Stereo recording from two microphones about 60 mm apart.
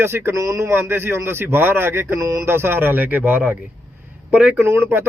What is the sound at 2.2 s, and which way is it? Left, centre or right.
Speech, right.